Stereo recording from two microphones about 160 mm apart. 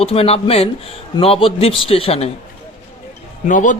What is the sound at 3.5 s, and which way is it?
Speech, 55° left (ahead or behind).